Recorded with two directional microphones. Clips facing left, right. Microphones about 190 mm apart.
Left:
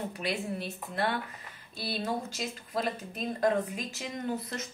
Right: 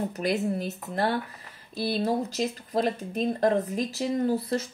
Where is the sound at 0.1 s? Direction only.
45° right (ahead or behind).